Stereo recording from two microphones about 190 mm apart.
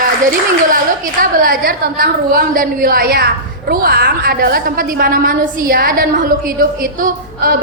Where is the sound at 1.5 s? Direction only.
50° right (ahead or behind).